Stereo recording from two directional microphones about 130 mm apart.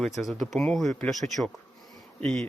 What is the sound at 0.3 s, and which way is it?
Speech, centre (ahead or behind).